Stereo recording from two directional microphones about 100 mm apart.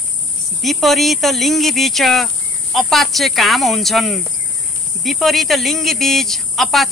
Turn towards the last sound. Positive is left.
turn(degrees=0)  # may be behind; listen again after turning